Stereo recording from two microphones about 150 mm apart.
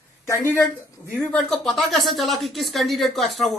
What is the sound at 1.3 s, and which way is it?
Speech, centre (ahead or behind).